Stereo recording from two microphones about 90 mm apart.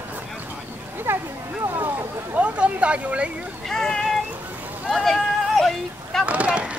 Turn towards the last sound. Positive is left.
turn(degrees=-15)  # may be behind; listen again after turning